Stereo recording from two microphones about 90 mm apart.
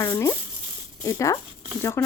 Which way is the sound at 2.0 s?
25° left (ahead or behind).